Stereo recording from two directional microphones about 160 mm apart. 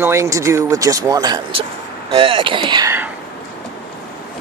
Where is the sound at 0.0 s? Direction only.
15° right (ahead or behind).